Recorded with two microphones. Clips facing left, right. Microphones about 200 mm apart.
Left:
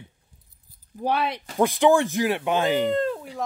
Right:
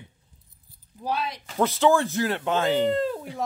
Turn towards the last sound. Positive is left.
turn(degrees=-5)  # may be behind; listen again after turning